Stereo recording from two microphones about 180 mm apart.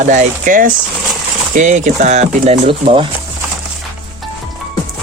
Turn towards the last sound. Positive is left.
turn(degrees=-30)  # may be behind; listen again after turning